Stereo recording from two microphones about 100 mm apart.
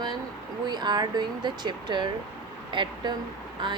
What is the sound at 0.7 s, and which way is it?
Speech, 45° right (ahead or behind).